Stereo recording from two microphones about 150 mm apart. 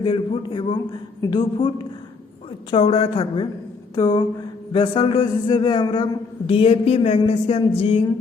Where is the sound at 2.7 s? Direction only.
40° left (ahead or behind).